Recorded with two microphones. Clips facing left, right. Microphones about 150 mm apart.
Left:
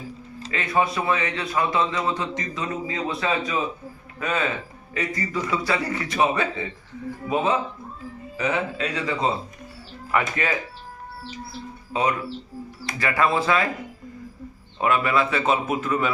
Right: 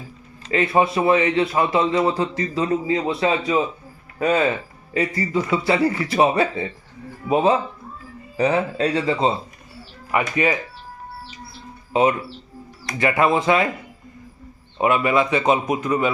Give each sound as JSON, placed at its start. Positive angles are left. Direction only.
{"t": 0.5, "sound": "a man's voice", "side_deg": -25}
{"t": 10.1, "sound": "a man's voice", "side_deg": -15}
{"t": 11.9, "sound": "a man's voice", "side_deg": -25}
{"t": 14.8, "sound": "a man's voice", "side_deg": -15}